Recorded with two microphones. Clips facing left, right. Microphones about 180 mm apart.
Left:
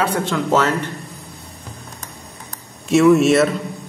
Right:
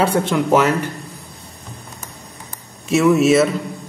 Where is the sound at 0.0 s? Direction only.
25° right (ahead or behind).